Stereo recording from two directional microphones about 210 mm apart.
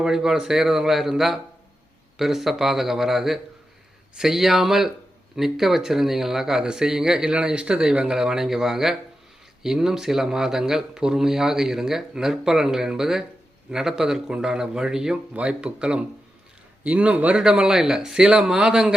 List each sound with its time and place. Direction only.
0.0 s speech: centre (ahead or behind)